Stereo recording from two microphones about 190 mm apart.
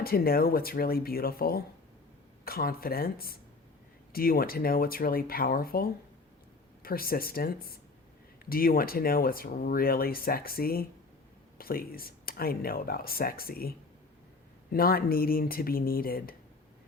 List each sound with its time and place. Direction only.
0.0 s speech: 50° left (ahead or behind)